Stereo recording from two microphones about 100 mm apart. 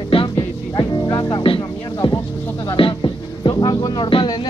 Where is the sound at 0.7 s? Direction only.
40° left (ahead or behind).